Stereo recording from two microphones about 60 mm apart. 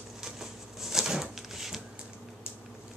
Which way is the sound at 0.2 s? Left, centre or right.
Centre.